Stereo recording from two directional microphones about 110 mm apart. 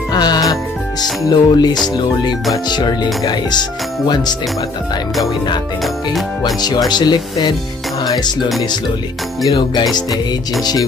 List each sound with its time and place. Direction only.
0.1 s music: 40° left (ahead or behind)
1.2 s speech: 40° left (ahead or behind)
6.4 s speech: 40° left (ahead or behind)